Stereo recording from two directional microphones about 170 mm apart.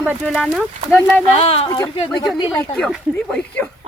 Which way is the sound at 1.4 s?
35° left (ahead or behind).